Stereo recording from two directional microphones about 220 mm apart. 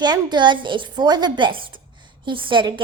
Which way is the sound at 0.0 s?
20° right (ahead or behind).